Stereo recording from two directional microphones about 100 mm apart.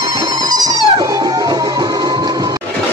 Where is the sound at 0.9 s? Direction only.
35° right (ahead or behind).